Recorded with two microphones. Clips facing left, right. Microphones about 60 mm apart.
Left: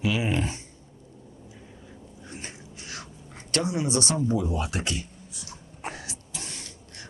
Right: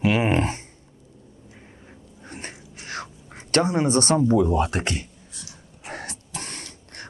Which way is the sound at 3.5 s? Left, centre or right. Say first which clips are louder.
Right 6 dB; right.